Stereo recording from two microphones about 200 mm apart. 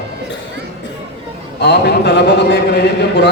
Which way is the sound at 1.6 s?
55° left (ahead or behind).